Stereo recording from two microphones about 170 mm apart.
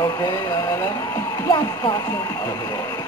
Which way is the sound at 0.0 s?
20° left (ahead or behind).